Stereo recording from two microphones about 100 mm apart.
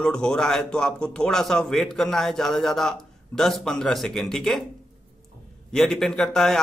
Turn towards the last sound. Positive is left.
turn(degrees=5)  # may be behind; listen again after turning